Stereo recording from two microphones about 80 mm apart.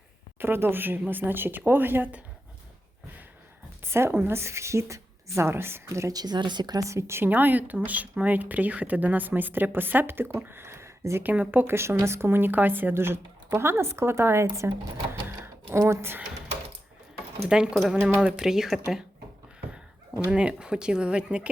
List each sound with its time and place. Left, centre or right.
0.3 s speech: right
3.8 s speech: right
6.1 s speech: right
6.8 s speech: right
7.3 s speech: right
11.2 s speech: right
15.7 s speech: right
17.5 s speech: centre
18.3 s speech: centre